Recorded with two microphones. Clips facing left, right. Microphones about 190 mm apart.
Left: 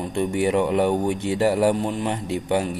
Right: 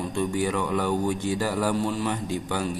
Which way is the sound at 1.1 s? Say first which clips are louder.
Left 3 dB; 65° left (ahead or behind).